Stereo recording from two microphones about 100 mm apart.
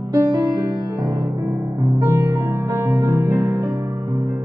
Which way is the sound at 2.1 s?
30° right (ahead or behind).